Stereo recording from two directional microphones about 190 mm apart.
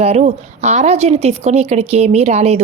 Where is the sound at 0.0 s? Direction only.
35° right (ahead or behind).